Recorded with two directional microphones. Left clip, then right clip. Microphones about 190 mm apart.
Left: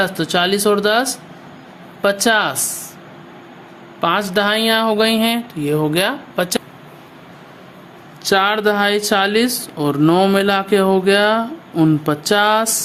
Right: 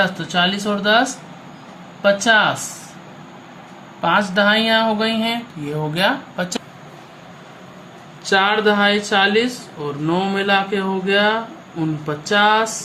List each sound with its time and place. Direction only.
0.0 s speech: 65° left (ahead or behind)
4.0 s speech: 60° left (ahead or behind)
8.2 s speech: 60° left (ahead or behind)